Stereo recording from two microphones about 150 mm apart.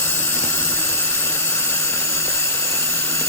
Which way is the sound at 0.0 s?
15° left (ahead or behind).